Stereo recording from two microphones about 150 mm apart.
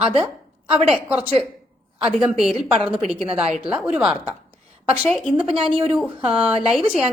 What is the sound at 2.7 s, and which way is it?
Speech, 35° right (ahead or behind).